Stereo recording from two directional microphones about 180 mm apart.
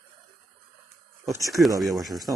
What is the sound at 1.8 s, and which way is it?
Speech, centre (ahead or behind).